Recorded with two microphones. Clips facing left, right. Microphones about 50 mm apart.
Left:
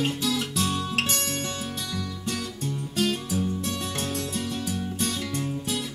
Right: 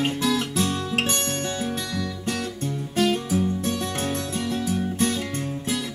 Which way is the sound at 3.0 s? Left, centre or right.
Right.